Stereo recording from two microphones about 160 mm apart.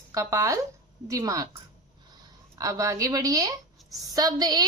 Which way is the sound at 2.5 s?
20° right (ahead or behind).